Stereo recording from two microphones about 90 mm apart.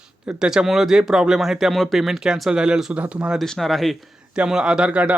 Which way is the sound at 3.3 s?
5° left (ahead or behind).